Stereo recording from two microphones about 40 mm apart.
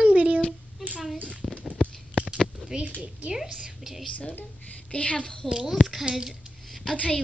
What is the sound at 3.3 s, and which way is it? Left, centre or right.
Speech, centre.